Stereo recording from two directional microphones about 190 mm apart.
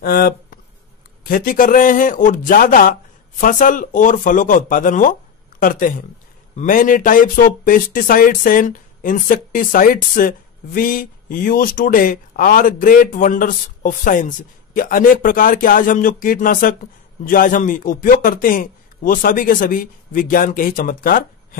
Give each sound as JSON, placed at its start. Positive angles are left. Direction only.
{"t": 0.0, "sound": "speech", "side_deg": 50}